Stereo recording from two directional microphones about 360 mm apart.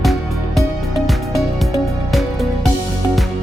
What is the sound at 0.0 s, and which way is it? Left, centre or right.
Music, centre.